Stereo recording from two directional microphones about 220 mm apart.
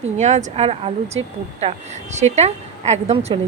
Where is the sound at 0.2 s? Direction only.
30° right (ahead or behind).